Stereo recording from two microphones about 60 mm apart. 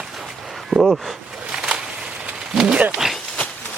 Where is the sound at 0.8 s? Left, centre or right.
Centre.